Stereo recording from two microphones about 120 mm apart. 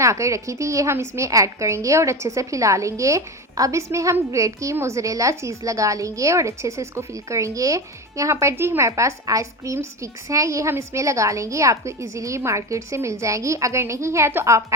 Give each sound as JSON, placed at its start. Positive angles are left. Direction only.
{"t": 0.0, "sound": "a woman's voice", "side_deg": -25}